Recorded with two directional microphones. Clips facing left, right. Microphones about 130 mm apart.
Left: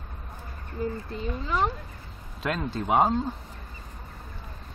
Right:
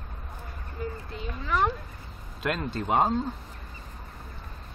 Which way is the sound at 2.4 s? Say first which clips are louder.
Left 1 dB; centre (ahead or behind).